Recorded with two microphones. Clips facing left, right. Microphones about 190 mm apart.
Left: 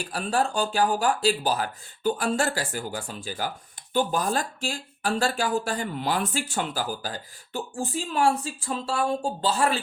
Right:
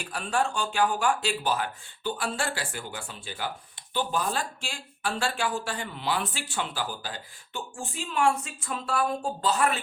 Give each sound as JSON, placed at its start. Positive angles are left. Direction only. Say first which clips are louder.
{"t": 0.0, "sound": "speech", "louder": "left 2 dB", "side_deg": 40}